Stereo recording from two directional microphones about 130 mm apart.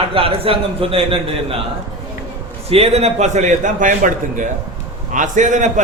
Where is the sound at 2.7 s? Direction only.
50° right (ahead or behind); by 5.8 s 75° right (ahead or behind).